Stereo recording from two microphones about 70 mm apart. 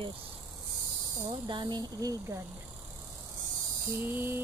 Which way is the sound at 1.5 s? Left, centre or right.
Right.